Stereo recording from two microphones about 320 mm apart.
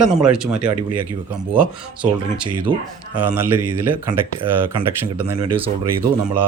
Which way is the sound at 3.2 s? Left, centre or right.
Centre.